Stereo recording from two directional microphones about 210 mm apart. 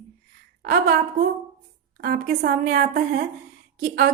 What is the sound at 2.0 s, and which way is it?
A woman's voice, 50° right (ahead or behind).